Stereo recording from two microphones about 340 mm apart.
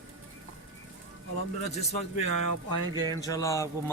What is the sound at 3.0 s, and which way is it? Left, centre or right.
Speech, centre.